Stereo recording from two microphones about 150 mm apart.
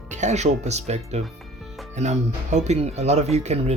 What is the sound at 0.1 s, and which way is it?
Speech, 50° right (ahead or behind).